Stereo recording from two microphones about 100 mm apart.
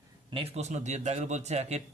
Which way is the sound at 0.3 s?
80° right.